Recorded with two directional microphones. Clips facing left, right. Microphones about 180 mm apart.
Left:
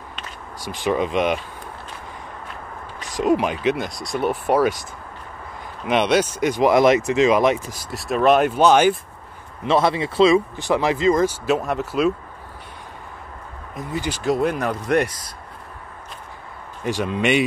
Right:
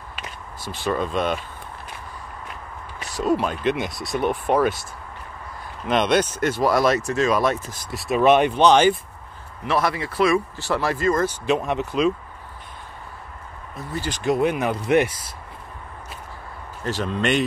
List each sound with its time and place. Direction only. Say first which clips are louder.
0.6 s speech: left 3 dB; 15° left (ahead or behind)
3.2 s speech: left 3 dB; 15° left (ahead or behind)
3.7 s speech: even; centre (ahead or behind)
5.9 s speech: left 1 dB; 10° left (ahead or behind)
7.9 s speech: even; centre (ahead or behind)
9.6 s speech: left 4 dB; 25° left (ahead or behind)
11.4 s speech: left 1 dB; centre (ahead or behind)
13.7 s speech: left 3 dB; 15° left (ahead or behind)
14.2 s speech: right 1 dB; centre (ahead or behind)
16.8 s speech: left 2 dB; 10° left (ahead or behind)